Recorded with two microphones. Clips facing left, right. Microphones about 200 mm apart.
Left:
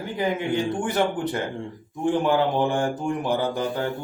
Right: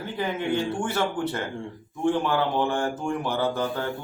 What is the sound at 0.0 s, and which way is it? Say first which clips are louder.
Speech: left 3 dB; 15° left (ahead or behind).